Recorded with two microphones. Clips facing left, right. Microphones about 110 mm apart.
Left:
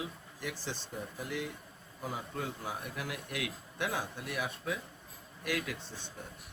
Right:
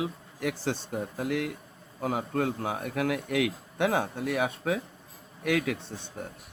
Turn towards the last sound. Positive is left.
turn(degrees=-60)  # may be behind; listen again after turning